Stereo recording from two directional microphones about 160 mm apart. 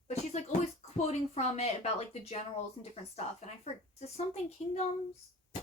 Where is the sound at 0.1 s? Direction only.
45° left (ahead or behind).